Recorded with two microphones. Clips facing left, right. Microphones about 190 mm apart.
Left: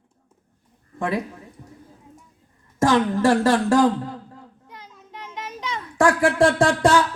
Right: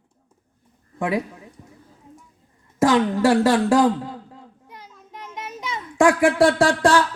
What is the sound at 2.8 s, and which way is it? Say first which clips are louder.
Speech: right 1 dB; 10° right (ahead or behind).